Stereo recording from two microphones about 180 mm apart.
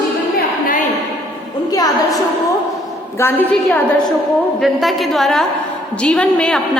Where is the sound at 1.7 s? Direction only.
20° left (ahead or behind).